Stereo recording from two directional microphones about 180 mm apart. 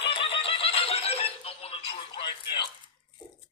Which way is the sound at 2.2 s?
35° left (ahead or behind).